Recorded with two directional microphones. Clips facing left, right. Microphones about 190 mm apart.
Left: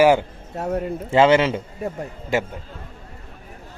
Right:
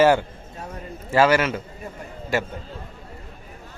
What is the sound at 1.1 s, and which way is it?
Speech, 25° left (ahead or behind).